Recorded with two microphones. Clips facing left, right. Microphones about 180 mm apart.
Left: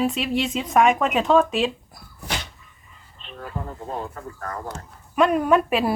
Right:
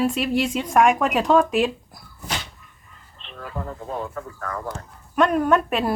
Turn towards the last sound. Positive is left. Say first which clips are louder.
# left 1 dB
turn(degrees=5)  # may be behind; listen again after turning